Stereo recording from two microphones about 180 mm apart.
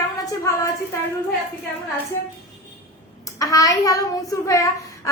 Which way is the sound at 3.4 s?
20° left (ahead or behind).